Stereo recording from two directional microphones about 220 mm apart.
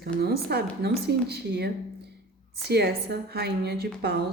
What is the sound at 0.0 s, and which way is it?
A woman's voice, 45° right (ahead or behind).